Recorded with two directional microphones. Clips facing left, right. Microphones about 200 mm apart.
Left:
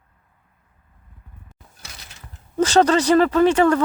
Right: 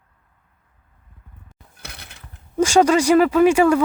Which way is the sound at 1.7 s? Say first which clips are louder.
Right 4 dB; 60° right (ahead or behind).